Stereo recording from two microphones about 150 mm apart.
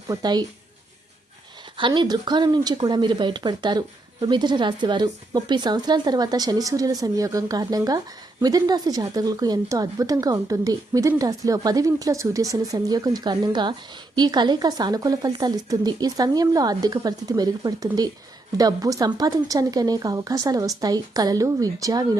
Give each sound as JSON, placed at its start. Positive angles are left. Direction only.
{"t": 0.1, "sound": "speech", "side_deg": -25}
{"t": 1.7, "sound": "speech", "side_deg": -30}